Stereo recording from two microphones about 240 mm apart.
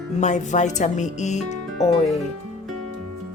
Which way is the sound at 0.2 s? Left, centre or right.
Left.